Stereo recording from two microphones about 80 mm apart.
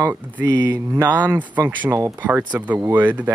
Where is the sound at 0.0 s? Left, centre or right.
Right.